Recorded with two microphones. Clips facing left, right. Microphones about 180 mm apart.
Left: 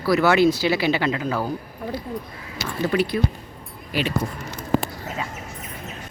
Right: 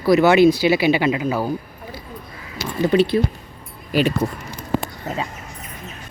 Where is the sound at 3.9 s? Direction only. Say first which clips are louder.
Right 6 dB; 45° right (ahead or behind).